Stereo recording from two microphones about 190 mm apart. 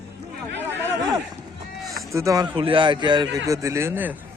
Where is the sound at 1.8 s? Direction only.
Centre (ahead or behind).